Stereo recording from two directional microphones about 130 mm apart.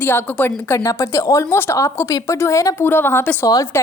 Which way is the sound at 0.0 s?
15° left (ahead or behind).